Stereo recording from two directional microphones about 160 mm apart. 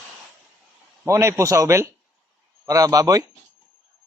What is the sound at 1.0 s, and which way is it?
A man's voice, 15° right (ahead or behind).